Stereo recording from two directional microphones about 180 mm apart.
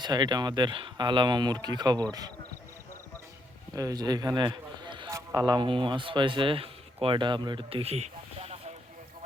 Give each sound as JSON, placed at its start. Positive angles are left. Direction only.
{"t": 0.0, "sound": "speech", "side_deg": -25}
{"t": 3.8, "sound": "a man's voice", "side_deg": -20}